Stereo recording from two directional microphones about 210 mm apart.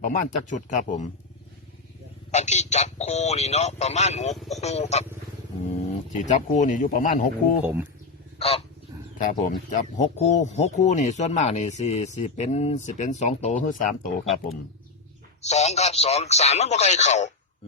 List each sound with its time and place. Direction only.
0.0 s speech: 35° left (ahead or behind)
2.3 s speech: 35° left (ahead or behind)
6.1 s speech: 35° left (ahead or behind)
7.6 s speech: 10° right (ahead or behind)
8.4 s goose: 30° left (ahead or behind)
9.1 s speech: 40° left (ahead or behind)
15.4 s speech: 30° left (ahead or behind)